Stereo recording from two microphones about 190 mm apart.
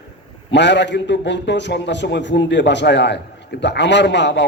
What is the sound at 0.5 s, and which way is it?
A man's voice, 65° left (ahead or behind).